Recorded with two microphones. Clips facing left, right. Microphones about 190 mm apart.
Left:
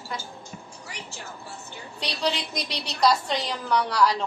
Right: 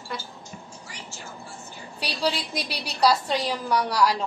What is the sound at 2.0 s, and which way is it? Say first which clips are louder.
A woman's voice: right 1 dB; 5° right (ahead or behind).